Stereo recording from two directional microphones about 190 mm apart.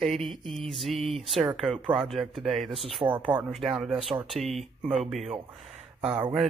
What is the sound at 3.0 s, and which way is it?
Speech, 15° right (ahead or behind).